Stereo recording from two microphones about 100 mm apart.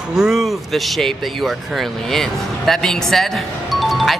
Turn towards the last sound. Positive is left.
turn(degrees=0)  # may be behind; listen again after turning